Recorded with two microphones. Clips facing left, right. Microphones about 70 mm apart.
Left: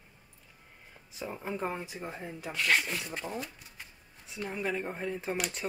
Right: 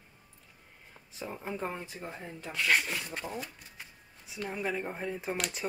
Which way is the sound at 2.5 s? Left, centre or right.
Centre.